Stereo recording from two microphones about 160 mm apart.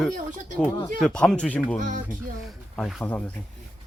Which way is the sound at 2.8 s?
Centre (ahead or behind).